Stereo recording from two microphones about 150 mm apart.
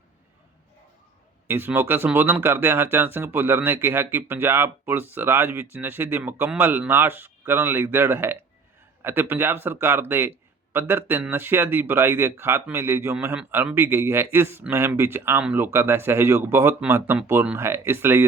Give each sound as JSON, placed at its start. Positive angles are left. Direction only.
{"t": 1.5, "sound": "speech", "side_deg": -15}